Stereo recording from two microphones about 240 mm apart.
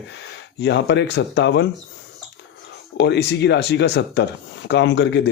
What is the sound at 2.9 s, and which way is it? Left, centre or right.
A man's voice, left.